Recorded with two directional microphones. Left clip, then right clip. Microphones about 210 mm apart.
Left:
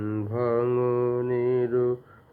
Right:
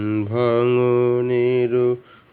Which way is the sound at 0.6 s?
40° right (ahead or behind).